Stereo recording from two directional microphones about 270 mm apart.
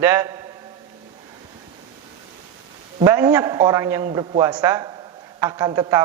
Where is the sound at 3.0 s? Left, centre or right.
Centre.